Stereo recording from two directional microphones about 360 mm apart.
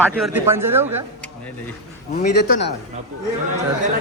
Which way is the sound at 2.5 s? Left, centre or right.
Left.